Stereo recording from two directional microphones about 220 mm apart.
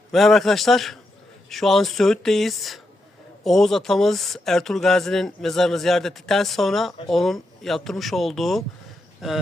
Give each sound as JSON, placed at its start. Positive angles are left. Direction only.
{"t": 0.1, "sound": "speech", "side_deg": 0}